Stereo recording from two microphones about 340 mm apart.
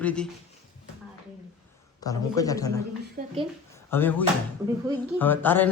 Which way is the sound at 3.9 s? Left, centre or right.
Centre.